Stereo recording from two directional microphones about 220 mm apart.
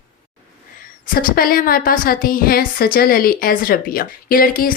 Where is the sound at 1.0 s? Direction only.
40° left (ahead or behind).